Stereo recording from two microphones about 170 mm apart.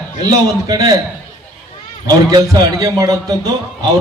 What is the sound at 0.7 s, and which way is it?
Speech, 25° right (ahead or behind).